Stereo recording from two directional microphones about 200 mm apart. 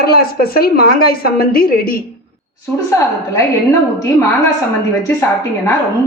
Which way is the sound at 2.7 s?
15° left (ahead or behind).